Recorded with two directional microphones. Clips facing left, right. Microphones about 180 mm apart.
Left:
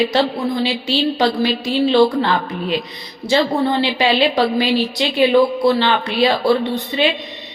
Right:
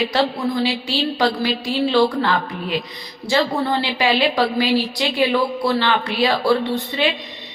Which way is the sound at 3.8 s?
25° left (ahead or behind).